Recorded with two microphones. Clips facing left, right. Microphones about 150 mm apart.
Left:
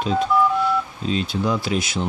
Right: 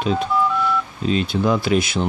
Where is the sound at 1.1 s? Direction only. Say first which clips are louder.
Right 4 dB; 60° right (ahead or behind).